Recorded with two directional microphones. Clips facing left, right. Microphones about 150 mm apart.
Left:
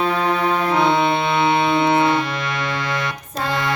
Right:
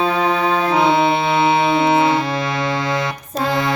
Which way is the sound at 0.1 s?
15° right (ahead or behind).